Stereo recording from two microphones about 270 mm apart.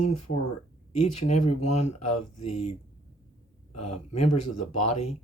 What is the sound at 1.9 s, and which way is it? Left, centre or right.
Speech, left.